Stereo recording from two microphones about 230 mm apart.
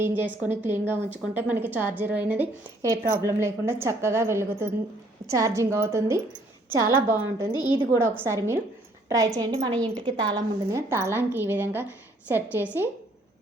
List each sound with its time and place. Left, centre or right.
0.0 s a woman's voice: centre